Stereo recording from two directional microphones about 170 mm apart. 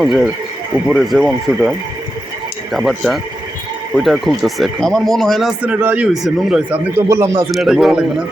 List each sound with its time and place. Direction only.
0.0 s speech: centre (ahead or behind)
2.7 s speech: centre (ahead or behind)
6.9 s speech: 15° right (ahead or behind)
7.5 s speech: centre (ahead or behind)